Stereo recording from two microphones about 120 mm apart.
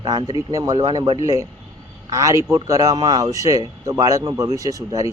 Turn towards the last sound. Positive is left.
turn(degrees=-30)  # may be behind; listen again after turning